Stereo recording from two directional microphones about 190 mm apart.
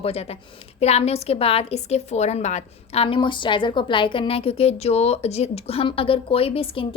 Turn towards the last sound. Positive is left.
turn(degrees=30)  # may be behind; listen again after turning